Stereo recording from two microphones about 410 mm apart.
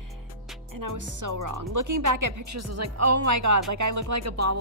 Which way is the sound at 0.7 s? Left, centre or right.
Right.